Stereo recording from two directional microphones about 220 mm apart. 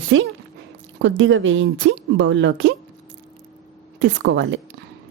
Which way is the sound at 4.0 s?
55° right (ahead or behind).